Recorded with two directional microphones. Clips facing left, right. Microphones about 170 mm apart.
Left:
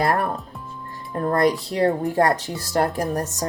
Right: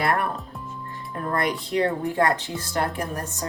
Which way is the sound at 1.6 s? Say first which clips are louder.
Left 3 dB; 35° left (ahead or behind).